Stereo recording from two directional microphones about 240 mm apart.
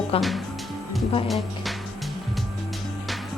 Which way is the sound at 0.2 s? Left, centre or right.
Centre.